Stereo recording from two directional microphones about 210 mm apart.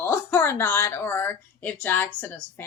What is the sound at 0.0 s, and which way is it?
Speech, 10° left (ahead or behind).